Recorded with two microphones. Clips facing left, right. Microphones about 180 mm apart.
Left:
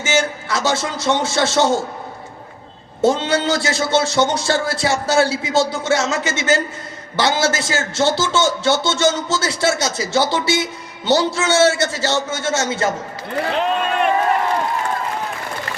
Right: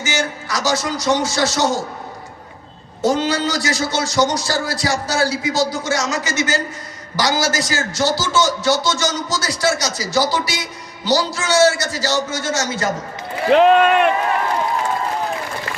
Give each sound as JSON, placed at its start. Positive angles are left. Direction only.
{"t": 0.0, "sound": "a man's voice", "side_deg": 25}
{"t": 3.0, "sound": "a man's voice", "side_deg": 25}
{"t": 13.5, "sound": "speech", "side_deg": -70}